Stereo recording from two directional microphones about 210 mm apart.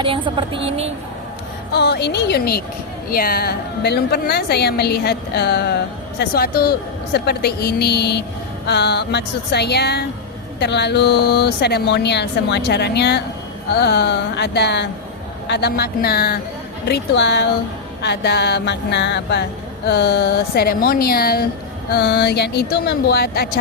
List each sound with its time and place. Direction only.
0.3 s speech: 25° right (ahead or behind)
1.7 s speech: 50° left (ahead or behind)